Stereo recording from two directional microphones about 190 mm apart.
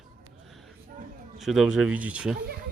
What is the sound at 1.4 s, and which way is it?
Speech, centre (ahead or behind).